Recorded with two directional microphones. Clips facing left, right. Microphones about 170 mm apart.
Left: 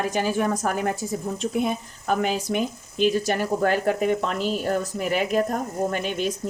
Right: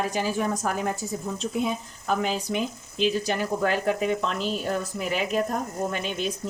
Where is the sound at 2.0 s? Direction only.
55° left (ahead or behind).